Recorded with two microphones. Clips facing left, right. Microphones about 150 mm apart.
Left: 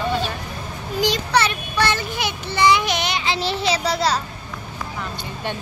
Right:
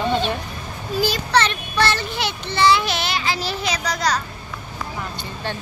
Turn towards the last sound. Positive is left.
turn(degrees=25)  # may be behind; listen again after turning